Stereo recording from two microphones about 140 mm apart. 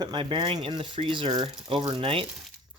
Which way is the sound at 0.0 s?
35° right (ahead or behind).